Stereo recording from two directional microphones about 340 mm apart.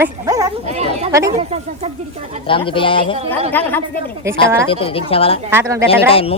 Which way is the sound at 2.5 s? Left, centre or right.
Centre.